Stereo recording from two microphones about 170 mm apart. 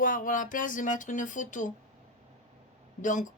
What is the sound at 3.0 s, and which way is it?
Speech, 50° left (ahead or behind).